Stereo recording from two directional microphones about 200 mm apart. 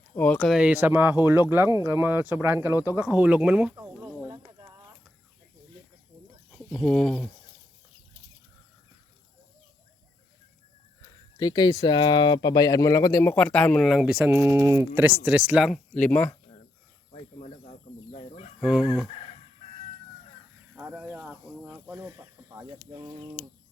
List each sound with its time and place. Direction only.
0.2 s speech: 5° left (ahead or behind)
6.5 s speech: centre (ahead or behind)
11.3 s speech: 20° left (ahead or behind)
17.1 s bird: 35° left (ahead or behind)
18.6 s speech: 5° right (ahead or behind)
20.7 s snake: 5° right (ahead or behind); by 23.5 s 30° right (ahead or behind)